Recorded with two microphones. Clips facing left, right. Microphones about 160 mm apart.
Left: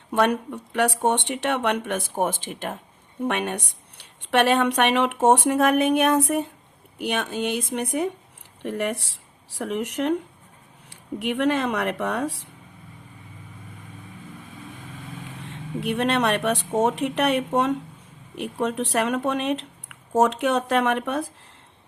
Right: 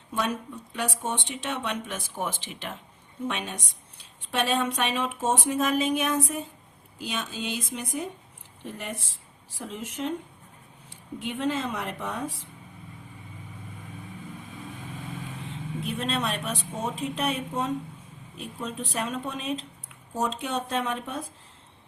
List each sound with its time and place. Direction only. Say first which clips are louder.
0.1 s speech: left 8 dB; 65° left (ahead or behind)
15.4 s speech: left 7 dB; 70° left (ahead or behind)